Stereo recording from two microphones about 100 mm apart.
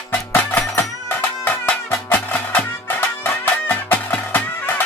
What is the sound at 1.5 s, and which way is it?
Music, 20° left (ahead or behind).